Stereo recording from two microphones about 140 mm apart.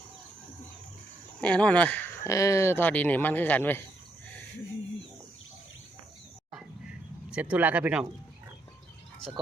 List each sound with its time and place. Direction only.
1.4 s speech: 10° left (ahead or behind)
7.3 s speech: 10° right (ahead or behind)